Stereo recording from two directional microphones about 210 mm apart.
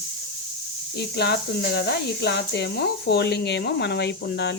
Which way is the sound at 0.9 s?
50° left (ahead or behind).